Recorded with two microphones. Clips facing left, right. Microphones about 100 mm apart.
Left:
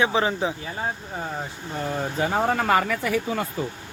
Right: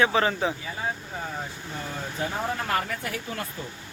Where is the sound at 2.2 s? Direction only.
65° left (ahead or behind); by 3.1 s 90° left.